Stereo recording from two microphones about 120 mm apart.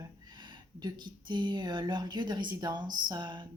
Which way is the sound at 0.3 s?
35° right (ahead or behind).